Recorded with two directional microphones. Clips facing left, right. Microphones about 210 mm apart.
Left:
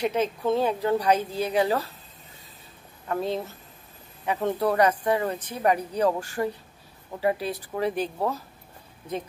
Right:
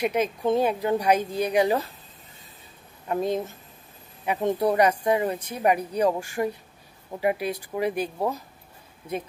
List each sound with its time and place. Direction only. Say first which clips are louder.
0.0 s speech: right 1 dB; 15° right (ahead or behind)
3.1 s speech: right 2 dB; 15° right (ahead or behind)